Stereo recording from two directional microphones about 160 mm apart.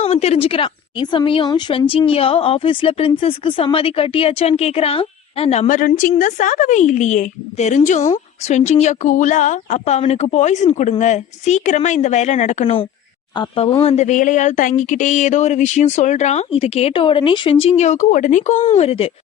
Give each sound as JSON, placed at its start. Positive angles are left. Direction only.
{"t": 0.0, "sound": "a woman's voice", "side_deg": 40}
{"t": 13.8, "sound": "speech", "side_deg": 45}